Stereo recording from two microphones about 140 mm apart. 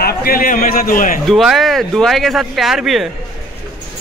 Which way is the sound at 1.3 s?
Centre (ahead or behind).